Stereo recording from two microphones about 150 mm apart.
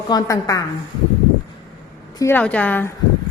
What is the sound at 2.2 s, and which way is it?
Speech, 15° left (ahead or behind).